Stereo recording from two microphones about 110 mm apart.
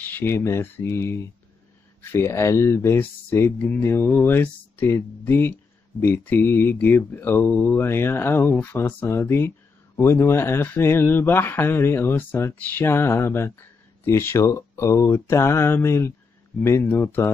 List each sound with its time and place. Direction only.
0.0 s speech: 15° left (ahead or behind)